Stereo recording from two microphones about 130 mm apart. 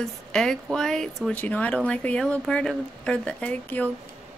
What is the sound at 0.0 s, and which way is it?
Speech, 5° left (ahead or behind).